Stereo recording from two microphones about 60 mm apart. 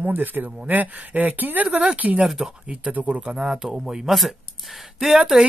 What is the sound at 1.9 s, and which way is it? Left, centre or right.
Speech, right.